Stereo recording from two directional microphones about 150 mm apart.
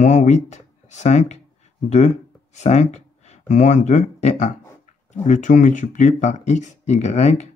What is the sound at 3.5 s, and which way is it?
Speech, 50° left (ahead or behind).